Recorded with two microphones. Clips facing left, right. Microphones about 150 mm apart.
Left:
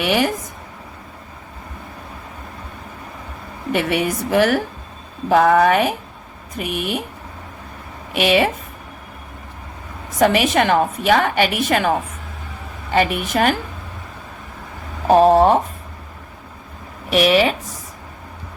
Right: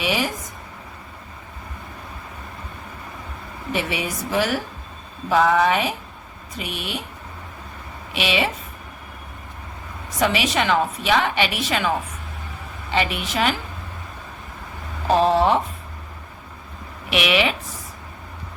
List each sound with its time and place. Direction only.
0.0 s speech: 60° left (ahead or behind)
3.7 s a woman's voice: 60° left (ahead or behind)
8.1 s a woman's voice: 50° left (ahead or behind)
10.2 s a woman's voice: 50° left (ahead or behind)
15.0 s a woman's voice: 50° left (ahead or behind)
17.1 s speech: 40° left (ahead or behind)